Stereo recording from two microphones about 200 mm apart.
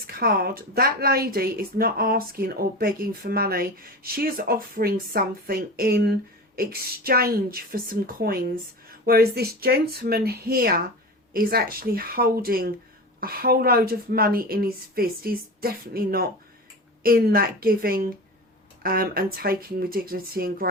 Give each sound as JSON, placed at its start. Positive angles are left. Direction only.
{"t": 0.1, "sound": "speech", "side_deg": -50}